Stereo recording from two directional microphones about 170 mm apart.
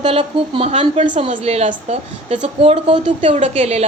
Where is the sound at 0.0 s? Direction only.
35° right (ahead or behind).